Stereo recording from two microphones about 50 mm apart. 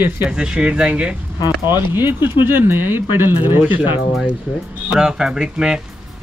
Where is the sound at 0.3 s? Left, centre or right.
Centre.